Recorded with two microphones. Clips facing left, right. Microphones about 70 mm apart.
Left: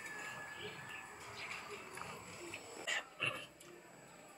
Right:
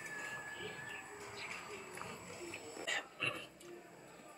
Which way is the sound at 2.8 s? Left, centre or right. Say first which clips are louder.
Even; centre.